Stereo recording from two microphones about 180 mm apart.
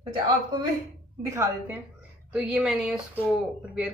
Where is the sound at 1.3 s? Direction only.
15° right (ahead or behind).